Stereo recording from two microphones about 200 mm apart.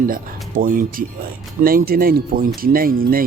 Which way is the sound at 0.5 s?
45° right (ahead or behind).